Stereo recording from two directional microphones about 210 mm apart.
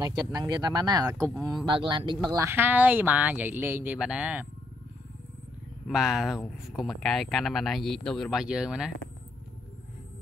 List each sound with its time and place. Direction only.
0.0 s speech: 20° right (ahead or behind)
5.9 s speech: centre (ahead or behind)